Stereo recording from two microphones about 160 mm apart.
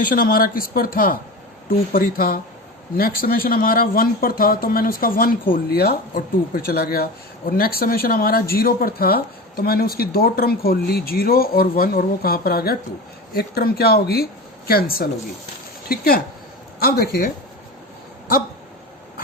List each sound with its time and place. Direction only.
0.0 s speech: 60° left (ahead or behind); by 6.0 s 80° left
6.1 s speech: 65° left (ahead or behind)